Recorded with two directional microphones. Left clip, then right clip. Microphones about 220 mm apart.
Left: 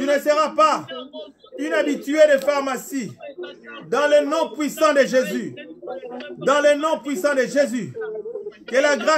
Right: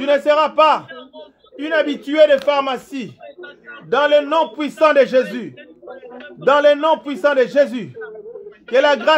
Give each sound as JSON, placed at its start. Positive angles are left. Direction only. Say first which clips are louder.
{"t": 0.1, "sound": "a man's voice", "louder": "right 5 dB", "side_deg": 5}
{"t": 3.9, "sound": "a man's voice", "louder": "right 3 dB", "side_deg": 5}
{"t": 6.4, "sound": "a man's voice", "louder": "right 4 dB", "side_deg": 5}
{"t": 8.0, "sound": "a sound", "louder": "left 3 dB", "side_deg": 45}
{"t": 8.7, "sound": "a man's voice", "louder": "right 4 dB", "side_deg": 5}